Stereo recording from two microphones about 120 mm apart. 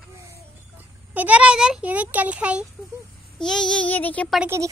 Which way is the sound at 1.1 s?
15° right (ahead or behind).